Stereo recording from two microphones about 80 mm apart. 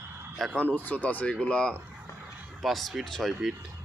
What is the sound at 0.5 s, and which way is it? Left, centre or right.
Speech, centre.